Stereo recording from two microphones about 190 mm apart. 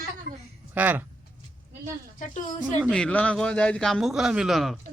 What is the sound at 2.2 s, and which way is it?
Speech, 40° left (ahead or behind).